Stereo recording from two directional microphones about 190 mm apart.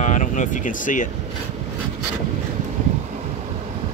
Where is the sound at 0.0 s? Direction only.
40° left (ahead or behind).